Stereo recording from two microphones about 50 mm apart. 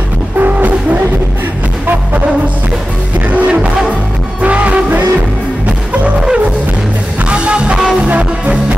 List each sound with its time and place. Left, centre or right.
0.4 s music: right
3.3 s music: right
7.2 s music: right